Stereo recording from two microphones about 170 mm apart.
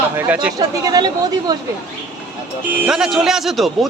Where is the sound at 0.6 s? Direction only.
25° right (ahead or behind).